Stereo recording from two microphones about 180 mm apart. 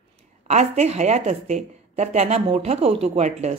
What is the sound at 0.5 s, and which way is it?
A woman's voice, 40° right (ahead or behind).